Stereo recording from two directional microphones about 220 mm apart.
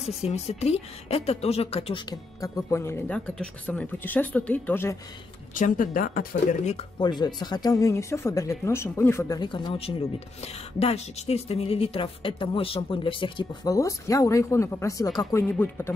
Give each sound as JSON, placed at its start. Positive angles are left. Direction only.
{"t": 0.2, "sound": "speech", "side_deg": 30}
{"t": 2.4, "sound": "speech", "side_deg": 10}
{"t": 5.5, "sound": "speech", "side_deg": 35}